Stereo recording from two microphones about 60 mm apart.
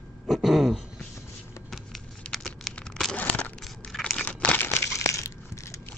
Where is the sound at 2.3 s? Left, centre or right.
Centre.